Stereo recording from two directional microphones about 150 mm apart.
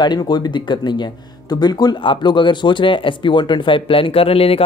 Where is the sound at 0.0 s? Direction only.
30° left (ahead or behind).